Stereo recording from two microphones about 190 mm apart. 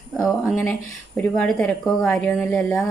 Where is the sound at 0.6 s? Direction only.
5° left (ahead or behind).